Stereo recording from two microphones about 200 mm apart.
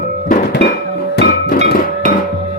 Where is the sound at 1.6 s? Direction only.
45° left (ahead or behind).